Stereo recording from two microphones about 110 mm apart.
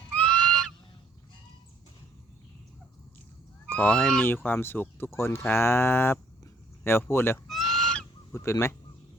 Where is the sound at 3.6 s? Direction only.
15° left (ahead or behind).